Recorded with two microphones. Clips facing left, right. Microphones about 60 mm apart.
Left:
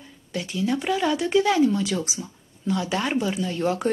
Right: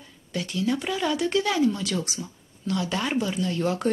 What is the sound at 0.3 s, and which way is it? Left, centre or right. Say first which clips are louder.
Speech: left 1 dB; centre.